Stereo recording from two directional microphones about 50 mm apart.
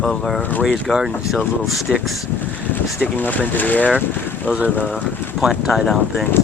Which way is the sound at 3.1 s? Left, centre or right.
Left.